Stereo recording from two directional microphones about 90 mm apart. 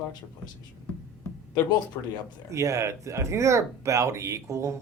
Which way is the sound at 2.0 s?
35° left (ahead or behind).